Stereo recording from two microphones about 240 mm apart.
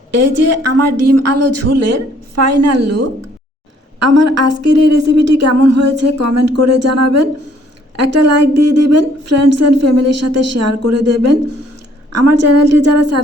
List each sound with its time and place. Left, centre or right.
0.1 s a woman's voice: right